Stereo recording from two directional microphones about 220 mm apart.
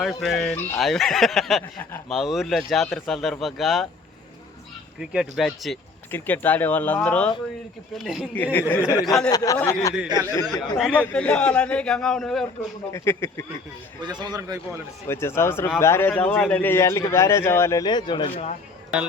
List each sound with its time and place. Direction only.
0.2 s speech: centre (ahead or behind)
4.9 s a man's voice: 5° right (ahead or behind)
12.9 s a man's voice: 10° left (ahead or behind)
14.0 s a man's voice: 20° right (ahead or behind)
15.0 s a man's voice: 10° left (ahead or behind)